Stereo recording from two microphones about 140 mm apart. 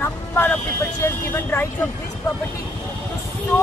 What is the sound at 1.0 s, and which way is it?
Speech, 15° left (ahead or behind).